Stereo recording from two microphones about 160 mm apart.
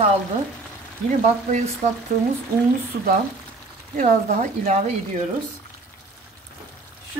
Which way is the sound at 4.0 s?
50° right (ahead or behind).